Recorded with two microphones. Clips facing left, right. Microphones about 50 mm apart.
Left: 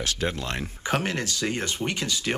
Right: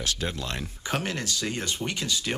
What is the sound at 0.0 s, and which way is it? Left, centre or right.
Speech, left.